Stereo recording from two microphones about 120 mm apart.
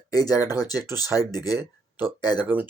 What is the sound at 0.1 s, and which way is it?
Speech, 30° left (ahead or behind).